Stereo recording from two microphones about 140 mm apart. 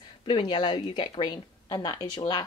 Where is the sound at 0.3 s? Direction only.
30° left (ahead or behind).